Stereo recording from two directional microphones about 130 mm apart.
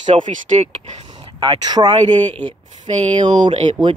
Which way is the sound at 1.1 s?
35° right (ahead or behind).